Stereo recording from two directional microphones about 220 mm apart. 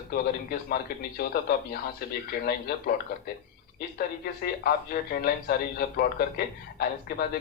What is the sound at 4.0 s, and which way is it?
Speech, 45° left (ahead or behind).